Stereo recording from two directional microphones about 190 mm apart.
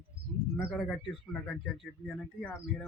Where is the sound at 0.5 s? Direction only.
Centre (ahead or behind).